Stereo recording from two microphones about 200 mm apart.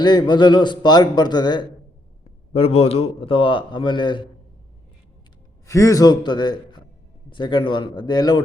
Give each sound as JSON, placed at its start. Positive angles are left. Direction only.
{"t": 0.0, "sound": "a man's voice", "side_deg": 20}
{"t": 5.6, "sound": "a man's voice", "side_deg": 15}